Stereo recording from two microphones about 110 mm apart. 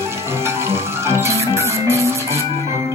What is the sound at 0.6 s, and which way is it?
Music, 25° right (ahead or behind).